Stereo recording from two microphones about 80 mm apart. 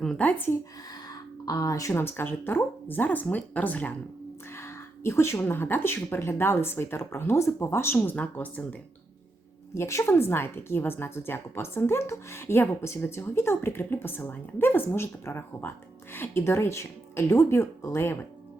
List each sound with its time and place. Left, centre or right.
0.0 s a woman's voice: centre
1.5 s speech: left
1.9 s a woman's voice: left
4.5 s speech: left; by 8.6 s centre
9.7 s a woman's voice: left